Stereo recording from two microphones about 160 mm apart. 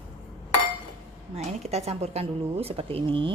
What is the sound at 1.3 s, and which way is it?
A woman's voice, 40° right (ahead or behind).